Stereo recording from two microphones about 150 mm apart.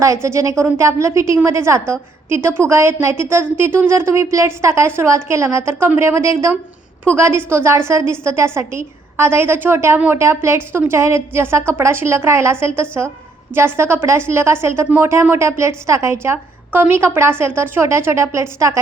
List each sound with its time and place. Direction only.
0.0 s a woman's voice: 20° right (ahead or behind)